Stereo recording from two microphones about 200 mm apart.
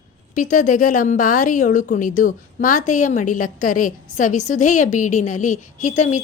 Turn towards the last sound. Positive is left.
turn(degrees=35)  # may be behind; listen again after turning